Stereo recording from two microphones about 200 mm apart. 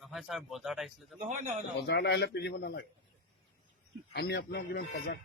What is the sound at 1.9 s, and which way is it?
Speech, 55° left (ahead or behind).